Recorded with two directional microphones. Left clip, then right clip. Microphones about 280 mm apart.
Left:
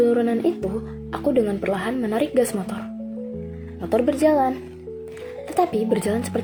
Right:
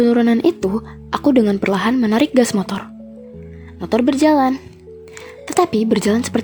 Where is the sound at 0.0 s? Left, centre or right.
Right.